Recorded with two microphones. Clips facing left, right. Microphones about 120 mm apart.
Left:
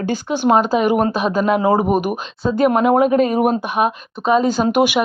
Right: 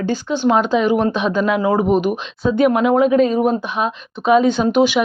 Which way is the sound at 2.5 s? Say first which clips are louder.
Even; 40° left (ahead or behind).